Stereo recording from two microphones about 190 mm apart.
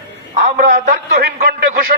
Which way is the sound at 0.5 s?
50° right (ahead or behind).